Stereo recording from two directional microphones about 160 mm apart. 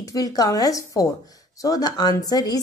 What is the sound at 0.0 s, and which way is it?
Speech, 25° left (ahead or behind).